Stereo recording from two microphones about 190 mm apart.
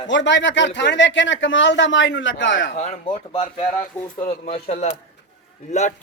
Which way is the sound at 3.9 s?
10° left (ahead or behind).